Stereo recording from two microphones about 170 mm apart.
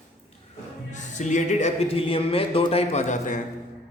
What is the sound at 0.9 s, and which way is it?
Speech, 45° left (ahead or behind).